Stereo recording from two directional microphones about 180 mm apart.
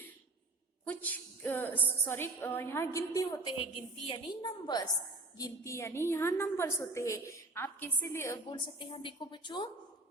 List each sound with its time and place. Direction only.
0.9 s a woman's voice: 10° left (ahead or behind)
3.6 s a woman's voice: 30° left (ahead or behind); by 8.4 s 15° left (ahead or behind)
8.4 s a woman's voice: 25° left (ahead or behind)